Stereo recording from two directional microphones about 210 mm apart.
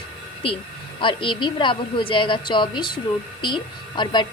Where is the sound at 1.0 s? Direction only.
25° left (ahead or behind).